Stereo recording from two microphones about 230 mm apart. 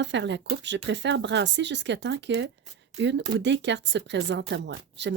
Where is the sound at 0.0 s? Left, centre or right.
Right.